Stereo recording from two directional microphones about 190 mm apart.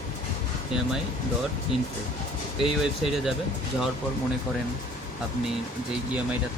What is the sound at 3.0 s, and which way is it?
Speech, centre (ahead or behind).